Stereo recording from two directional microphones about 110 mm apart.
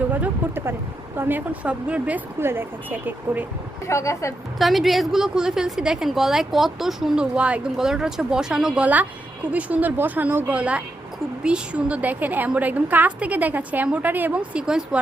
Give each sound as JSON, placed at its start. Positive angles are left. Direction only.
{"t": 0.1, "sound": "a woman's voice", "side_deg": -20}
{"t": 3.8, "sound": "a woman's voice", "side_deg": 25}
{"t": 4.5, "sound": "a woman's voice", "side_deg": 0}